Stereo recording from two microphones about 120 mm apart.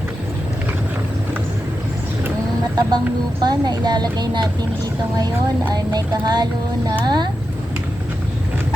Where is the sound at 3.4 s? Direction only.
35° right (ahead or behind).